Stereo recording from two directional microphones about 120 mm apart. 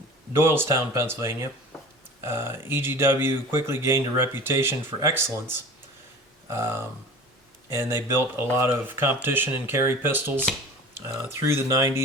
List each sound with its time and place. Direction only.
0.3 s speech: 20° right (ahead or behind)